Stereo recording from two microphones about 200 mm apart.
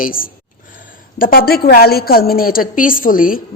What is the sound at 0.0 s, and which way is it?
A woman's voice, 45° left (ahead or behind).